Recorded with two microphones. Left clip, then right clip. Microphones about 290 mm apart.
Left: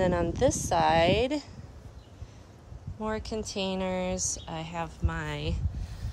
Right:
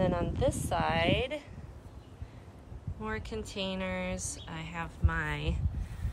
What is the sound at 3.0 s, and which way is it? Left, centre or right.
A woman's voice, centre.